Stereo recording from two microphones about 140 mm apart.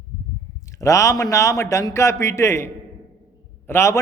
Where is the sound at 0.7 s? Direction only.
20° left (ahead or behind).